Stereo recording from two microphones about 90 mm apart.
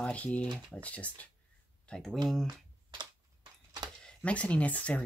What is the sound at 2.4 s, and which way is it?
Computer keyboard, 55° right (ahead or behind).